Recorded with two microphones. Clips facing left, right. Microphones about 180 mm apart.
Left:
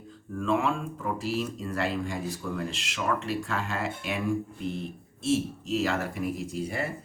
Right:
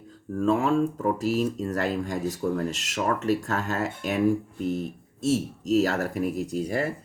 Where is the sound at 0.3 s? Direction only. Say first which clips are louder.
Right 5 dB; 40° right (ahead or behind).